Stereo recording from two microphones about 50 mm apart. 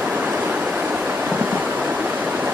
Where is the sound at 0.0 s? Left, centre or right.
Right.